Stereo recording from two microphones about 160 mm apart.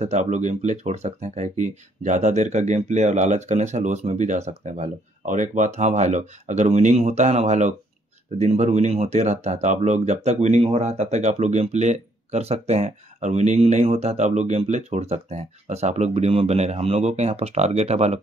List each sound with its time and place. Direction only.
0.0 s speech: 45° right (ahead or behind)